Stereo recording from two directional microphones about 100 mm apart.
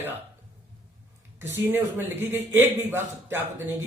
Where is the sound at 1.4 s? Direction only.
20° right (ahead or behind).